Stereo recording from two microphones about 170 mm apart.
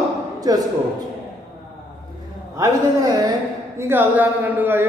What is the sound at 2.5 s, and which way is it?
A man's voice, 20° right (ahead or behind).